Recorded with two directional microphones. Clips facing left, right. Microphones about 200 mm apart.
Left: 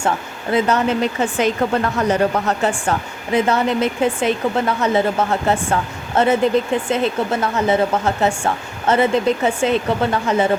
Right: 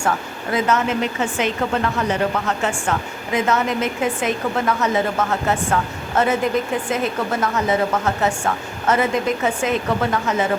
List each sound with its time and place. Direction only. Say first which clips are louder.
0.5 s a woman's voice: left 3 dB; 35° left (ahead or behind)